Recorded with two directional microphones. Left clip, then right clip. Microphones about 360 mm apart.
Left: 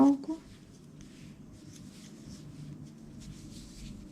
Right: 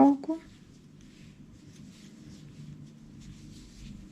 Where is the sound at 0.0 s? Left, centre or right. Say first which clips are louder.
Right 3 dB; centre.